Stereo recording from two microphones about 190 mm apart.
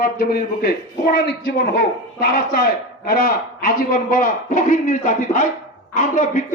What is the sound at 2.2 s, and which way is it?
Speech, 50° left (ahead or behind).